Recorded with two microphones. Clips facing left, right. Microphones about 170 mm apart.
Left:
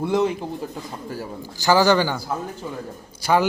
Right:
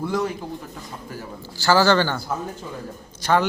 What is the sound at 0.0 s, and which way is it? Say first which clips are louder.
Speech: left 4 dB; 20° left (ahead or behind).